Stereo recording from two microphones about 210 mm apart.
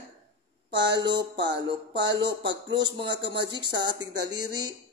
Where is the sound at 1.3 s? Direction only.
55° right (ahead or behind).